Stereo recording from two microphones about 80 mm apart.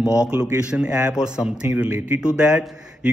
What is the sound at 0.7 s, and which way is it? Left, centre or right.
A man's voice, centre.